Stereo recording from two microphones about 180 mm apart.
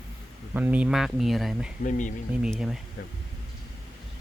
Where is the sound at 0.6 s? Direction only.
10° right (ahead or behind).